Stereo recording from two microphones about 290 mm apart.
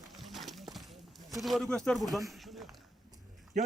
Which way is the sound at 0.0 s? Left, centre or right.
Centre.